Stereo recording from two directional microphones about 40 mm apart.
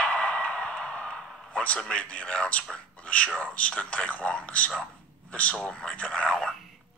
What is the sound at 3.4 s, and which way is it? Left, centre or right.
A man's voice, left.